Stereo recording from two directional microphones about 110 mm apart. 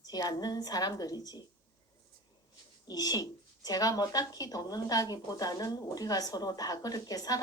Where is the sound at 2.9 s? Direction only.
35° left (ahead or behind).